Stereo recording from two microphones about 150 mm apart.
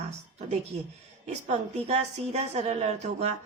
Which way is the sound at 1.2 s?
45° right (ahead or behind).